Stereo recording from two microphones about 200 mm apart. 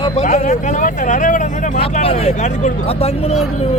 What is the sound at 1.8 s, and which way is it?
Speech, 30° left (ahead or behind).